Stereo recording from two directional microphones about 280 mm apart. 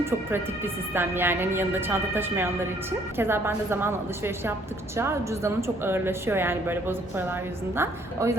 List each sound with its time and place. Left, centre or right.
0.0 s speech: centre